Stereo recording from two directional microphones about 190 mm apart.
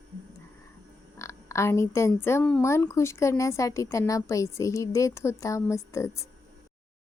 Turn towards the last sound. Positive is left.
turn(degrees=15)  # may be behind; listen again after turning